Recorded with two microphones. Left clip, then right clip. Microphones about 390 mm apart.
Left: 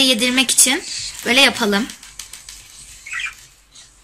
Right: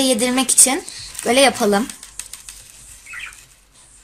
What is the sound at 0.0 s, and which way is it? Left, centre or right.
Speech, centre.